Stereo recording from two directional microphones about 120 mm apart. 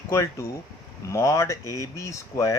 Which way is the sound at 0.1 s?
25° left (ahead or behind).